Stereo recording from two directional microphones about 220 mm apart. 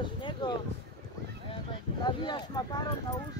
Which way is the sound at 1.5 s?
25° left (ahead or behind).